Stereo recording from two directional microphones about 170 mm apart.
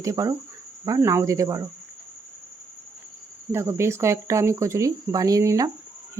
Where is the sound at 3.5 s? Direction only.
15° right (ahead or behind).